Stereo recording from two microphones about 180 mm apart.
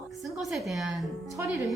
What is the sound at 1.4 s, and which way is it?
Speech, 10° right (ahead or behind).